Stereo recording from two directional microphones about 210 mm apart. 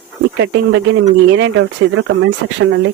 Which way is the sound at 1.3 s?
60° right (ahead or behind).